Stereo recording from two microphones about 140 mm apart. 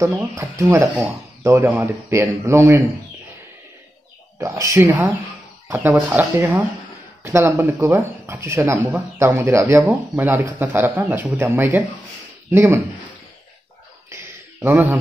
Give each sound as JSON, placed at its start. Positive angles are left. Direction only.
{"t": 0.0, "sound": "speech", "side_deg": -20}
{"t": 4.4, "sound": "speech", "side_deg": -25}
{"t": 14.6, "sound": "speech", "side_deg": -15}